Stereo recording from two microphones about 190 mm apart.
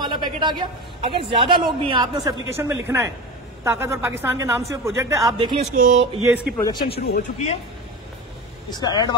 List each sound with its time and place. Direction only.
0.0 s a man's voice: 25° right (ahead or behind)
5.7 s speech: 40° right (ahead or behind)
6.2 s a woman's voice: 5° right (ahead or behind)
6.5 s speech: 20° left (ahead or behind)
7.2 s speech: 35° left (ahead or behind)
8.7 s speech: 20° left (ahead or behind)